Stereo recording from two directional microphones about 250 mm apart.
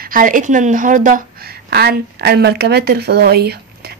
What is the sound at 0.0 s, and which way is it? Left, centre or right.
A woman's voice, right.